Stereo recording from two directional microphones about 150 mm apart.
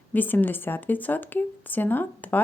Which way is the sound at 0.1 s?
10° left (ahead or behind).